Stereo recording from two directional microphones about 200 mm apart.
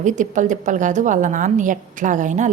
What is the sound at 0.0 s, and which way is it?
A woman's voice, 40° right (ahead or behind).